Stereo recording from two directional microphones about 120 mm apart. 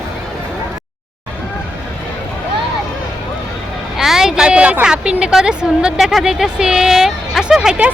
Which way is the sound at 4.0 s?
5° right (ahead or behind).